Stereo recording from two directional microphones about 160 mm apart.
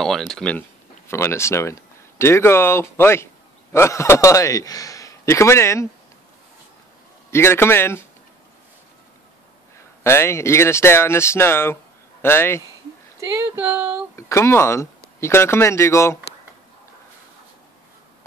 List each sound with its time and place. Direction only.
0.0 s a man's voice: 5° left (ahead or behind)
7.2 s speech: 15° left (ahead or behind)
10.0 s speech: 15° left (ahead or behind)
13.2 s speech: 20° right (ahead or behind)
14.1 s speech: 15° left (ahead or behind)